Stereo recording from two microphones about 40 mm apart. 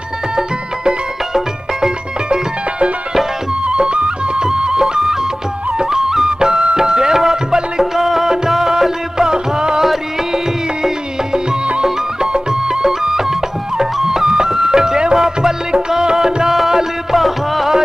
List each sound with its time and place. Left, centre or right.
0.4 s music: centre
11.3 s music: right
11.8 s music: centre